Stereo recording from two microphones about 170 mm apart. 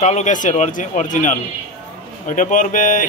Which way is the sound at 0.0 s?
45° left (ahead or behind).